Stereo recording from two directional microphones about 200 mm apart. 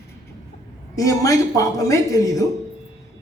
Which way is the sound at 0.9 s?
15° left (ahead or behind).